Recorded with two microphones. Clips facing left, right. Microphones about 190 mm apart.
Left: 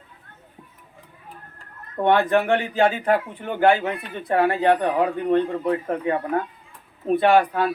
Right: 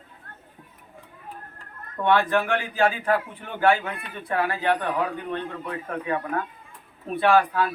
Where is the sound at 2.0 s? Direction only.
40° left (ahead or behind).